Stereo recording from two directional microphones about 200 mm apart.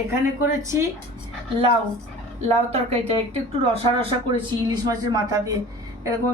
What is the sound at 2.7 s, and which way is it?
A woman's voice, 30° right (ahead or behind).